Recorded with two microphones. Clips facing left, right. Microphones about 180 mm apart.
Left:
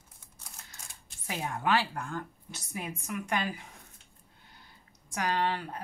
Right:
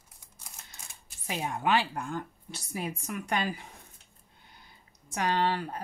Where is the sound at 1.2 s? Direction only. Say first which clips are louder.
Right 2 dB; 20° right (ahead or behind).